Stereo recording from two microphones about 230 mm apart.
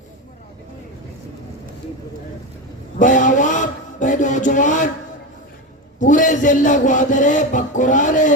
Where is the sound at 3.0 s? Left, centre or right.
Left.